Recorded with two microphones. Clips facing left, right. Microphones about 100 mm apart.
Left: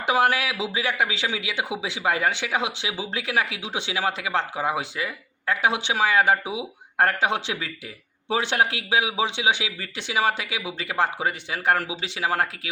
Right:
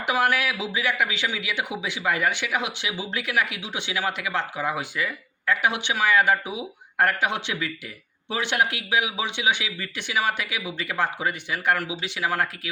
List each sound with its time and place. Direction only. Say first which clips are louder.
0.0 s speech: left 2 dB; 25° left (ahead or behind)